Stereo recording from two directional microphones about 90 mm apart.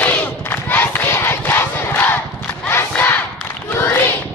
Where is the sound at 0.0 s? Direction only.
20° left (ahead or behind).